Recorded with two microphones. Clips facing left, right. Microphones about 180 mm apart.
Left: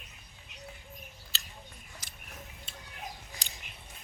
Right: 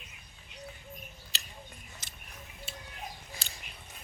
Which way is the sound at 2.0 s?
25° right (ahead or behind).